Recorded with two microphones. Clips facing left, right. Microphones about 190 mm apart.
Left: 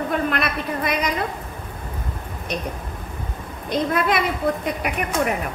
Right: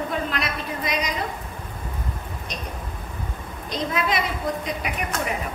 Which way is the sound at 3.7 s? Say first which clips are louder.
Left 4 dB; 55° left (ahead or behind).